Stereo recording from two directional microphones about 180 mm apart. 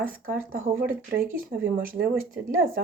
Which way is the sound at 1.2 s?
55° right (ahead or behind).